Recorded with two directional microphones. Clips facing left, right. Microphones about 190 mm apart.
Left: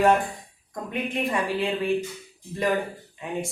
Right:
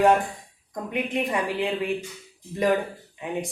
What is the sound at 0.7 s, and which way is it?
A woman's voice, 20° right (ahead or behind).